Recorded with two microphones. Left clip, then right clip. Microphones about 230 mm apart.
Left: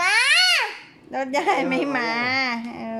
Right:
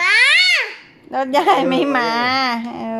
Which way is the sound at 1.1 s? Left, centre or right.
Centre.